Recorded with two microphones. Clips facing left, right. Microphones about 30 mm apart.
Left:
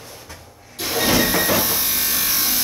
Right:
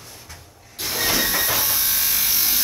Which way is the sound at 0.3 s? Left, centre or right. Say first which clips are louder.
Left 3 dB; centre.